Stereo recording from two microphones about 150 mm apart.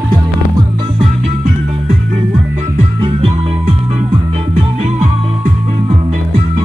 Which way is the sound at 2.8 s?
40° right (ahead or behind).